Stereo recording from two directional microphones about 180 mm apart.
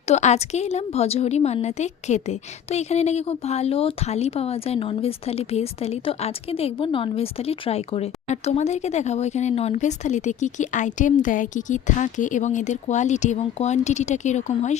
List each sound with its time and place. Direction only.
0.1 s a woman's voice: 40° left (ahead or behind)